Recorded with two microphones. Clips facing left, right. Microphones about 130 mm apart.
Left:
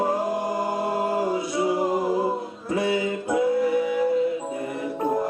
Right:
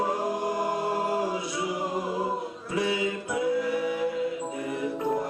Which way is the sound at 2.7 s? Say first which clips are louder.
Left 4 dB; 50° left (ahead or behind).